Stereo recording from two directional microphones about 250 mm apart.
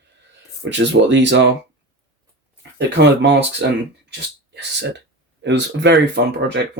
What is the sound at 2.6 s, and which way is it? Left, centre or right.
Speech, right.